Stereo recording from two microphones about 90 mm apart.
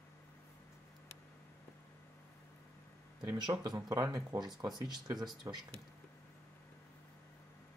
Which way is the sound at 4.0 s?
45° right (ahead or behind).